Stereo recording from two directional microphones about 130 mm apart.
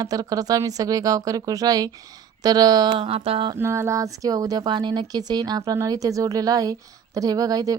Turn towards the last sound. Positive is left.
turn(degrees=-30)  # may be behind; listen again after turning